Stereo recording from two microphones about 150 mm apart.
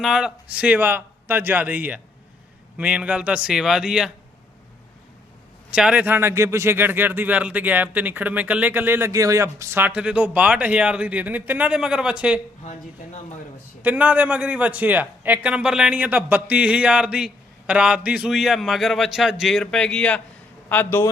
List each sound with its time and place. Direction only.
0.0 s a man's voice: 5° right (ahead or behind)
5.7 s a man's voice: 5° right (ahead or behind)
13.8 s a man's voice: 10° right (ahead or behind); by 21.1 s 15° left (ahead or behind)